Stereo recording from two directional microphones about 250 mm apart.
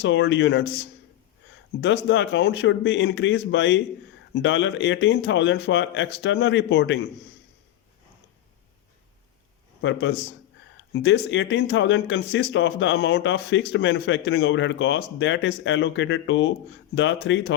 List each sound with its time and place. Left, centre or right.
0.0 s speech: left
1.8 s speech: left
11.0 s speech: left